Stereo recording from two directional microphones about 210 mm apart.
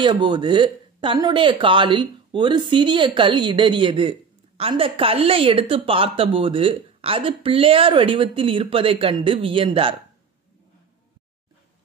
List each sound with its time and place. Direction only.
0.0 s speech: 20° right (ahead or behind)